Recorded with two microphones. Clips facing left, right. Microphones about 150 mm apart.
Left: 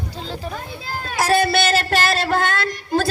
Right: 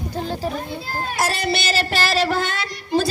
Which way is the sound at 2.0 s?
50° left (ahead or behind).